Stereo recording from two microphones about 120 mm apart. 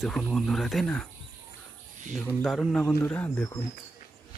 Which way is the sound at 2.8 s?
15° left (ahead or behind).